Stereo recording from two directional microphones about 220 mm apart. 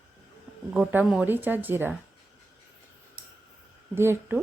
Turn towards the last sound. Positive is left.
turn(degrees=-10)  # may be behind; listen again after turning